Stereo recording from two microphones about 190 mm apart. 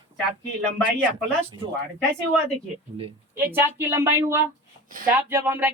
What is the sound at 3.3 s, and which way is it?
Speech, 10° right (ahead or behind).